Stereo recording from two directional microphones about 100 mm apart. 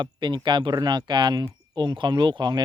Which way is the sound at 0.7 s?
40° right (ahead or behind).